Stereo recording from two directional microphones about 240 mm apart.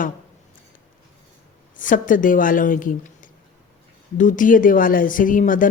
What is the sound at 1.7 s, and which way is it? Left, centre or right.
Speech, left.